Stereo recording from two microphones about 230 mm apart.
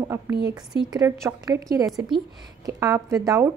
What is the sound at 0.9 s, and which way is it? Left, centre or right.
A woman's voice, centre.